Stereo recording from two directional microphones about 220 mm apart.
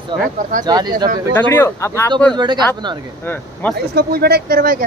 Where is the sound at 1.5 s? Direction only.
10° left (ahead or behind).